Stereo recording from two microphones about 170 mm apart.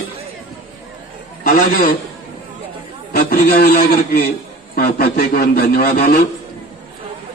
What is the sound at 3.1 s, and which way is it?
A man's voice, 60° left (ahead or behind).